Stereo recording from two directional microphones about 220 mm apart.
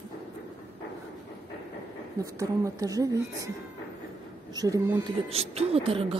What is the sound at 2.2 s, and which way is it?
Speech, 15° right (ahead or behind).